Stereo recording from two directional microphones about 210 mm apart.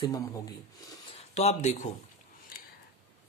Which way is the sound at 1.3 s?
30° left (ahead or behind).